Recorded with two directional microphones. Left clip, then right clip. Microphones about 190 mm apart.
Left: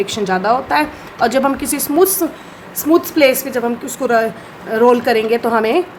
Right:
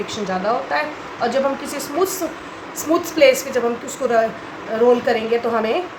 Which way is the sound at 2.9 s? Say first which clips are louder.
Left 2 dB; 40° left (ahead or behind).